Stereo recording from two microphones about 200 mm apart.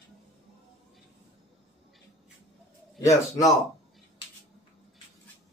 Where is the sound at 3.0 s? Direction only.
15° left (ahead or behind).